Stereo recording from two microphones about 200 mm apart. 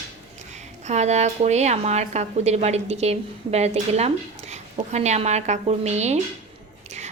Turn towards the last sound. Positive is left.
turn(degrees=-35)  # may be behind; listen again after turning